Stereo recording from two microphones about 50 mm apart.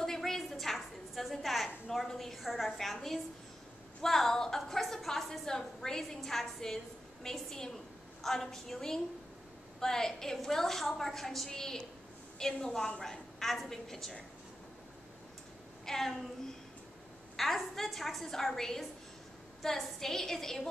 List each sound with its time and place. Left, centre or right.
0.0 s a sound: centre
1.9 s a woman's voice: centre
15.8 s a woman's voice: centre
17.4 s a woman's voice: centre